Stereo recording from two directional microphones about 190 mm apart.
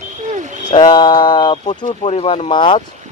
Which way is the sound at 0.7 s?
25° left (ahead or behind).